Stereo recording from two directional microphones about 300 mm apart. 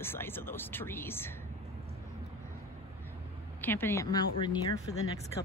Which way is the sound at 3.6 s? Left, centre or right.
Centre.